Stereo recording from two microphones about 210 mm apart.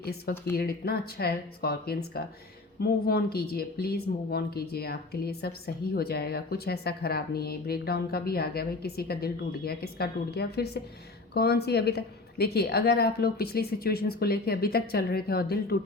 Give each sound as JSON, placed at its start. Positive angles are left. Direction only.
{"t": 0.0, "sound": "speech", "side_deg": 50}